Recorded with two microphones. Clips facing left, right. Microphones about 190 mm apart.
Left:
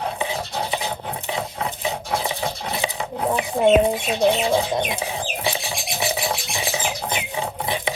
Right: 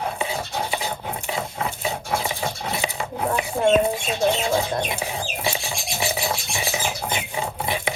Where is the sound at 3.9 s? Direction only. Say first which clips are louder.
Left 3 dB; 15° left (ahead or behind).